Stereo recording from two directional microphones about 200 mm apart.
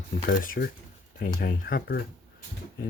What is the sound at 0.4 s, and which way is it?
Speech, 45° left (ahead or behind).